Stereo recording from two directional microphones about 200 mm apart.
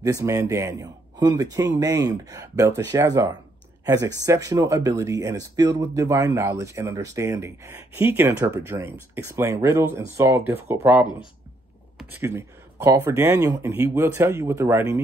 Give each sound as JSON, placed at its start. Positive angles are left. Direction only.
{"t": 0.0, "sound": "speech", "side_deg": -15}